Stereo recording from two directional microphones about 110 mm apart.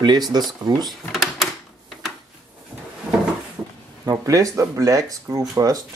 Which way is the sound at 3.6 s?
15° right (ahead or behind).